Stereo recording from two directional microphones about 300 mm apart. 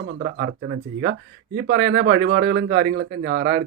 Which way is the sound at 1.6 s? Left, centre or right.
Right.